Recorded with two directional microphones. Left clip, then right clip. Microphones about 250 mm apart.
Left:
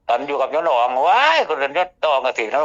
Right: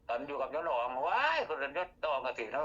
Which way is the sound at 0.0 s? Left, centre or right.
Left.